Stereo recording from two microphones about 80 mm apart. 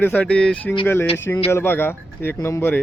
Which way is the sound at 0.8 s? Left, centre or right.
Left.